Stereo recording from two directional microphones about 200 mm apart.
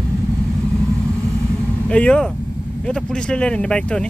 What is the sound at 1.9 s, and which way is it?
Speech, 5° left (ahead or behind).